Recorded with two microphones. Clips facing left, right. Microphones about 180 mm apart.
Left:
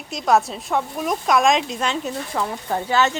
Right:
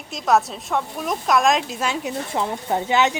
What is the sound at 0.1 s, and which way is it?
A woman's voice, centre (ahead or behind).